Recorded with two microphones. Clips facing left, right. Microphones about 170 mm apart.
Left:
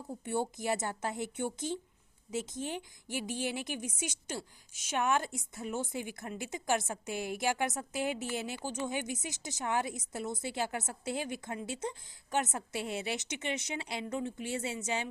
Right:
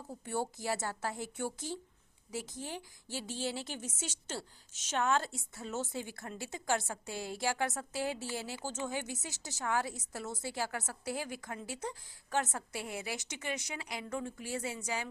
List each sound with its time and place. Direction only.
0.3 s a woman's voice: 20° left (ahead or behind)